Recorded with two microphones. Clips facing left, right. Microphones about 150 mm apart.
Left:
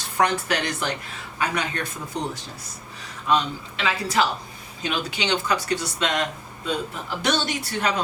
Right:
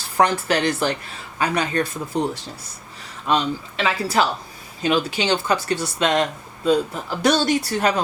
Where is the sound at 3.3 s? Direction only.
30° right (ahead or behind).